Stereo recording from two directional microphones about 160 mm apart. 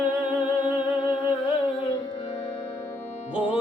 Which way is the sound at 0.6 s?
30° left (ahead or behind).